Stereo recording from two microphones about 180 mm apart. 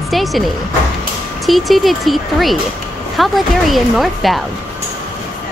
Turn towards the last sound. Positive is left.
turn(degrees=0)  # may be behind; listen again after turning